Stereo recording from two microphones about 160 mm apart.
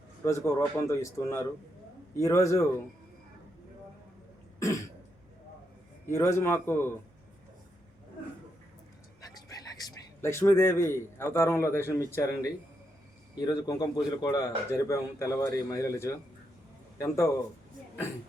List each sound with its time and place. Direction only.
0.3 s speech: 20° left (ahead or behind)
4.6 s throat clearing: 20° left (ahead or behind)
6.1 s speech: 15° left (ahead or behind)
9.2 s a man's voice: 20° left (ahead or behind)